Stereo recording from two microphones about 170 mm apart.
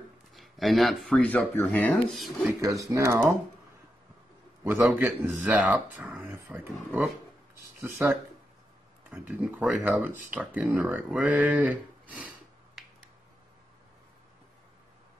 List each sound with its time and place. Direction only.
0.3 s speech: centre (ahead or behind)
2.4 s speech: 20° right (ahead or behind)
4.6 s speech: 10° right (ahead or behind)